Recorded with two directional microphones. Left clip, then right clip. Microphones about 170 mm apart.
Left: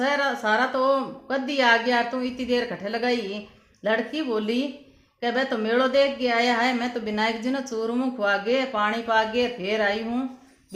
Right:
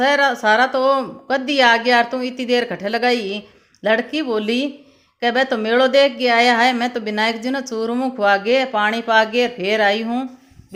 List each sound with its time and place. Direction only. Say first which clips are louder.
0.0 s a woman's voice: right 8 dB; 30° right (ahead or behind)